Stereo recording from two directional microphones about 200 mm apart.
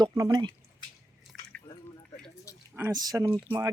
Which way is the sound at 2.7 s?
15° right (ahead or behind).